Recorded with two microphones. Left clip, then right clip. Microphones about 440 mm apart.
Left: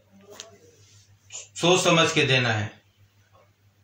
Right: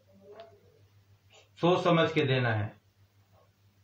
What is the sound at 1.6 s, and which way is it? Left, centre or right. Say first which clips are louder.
Speech: left 6 dB; right.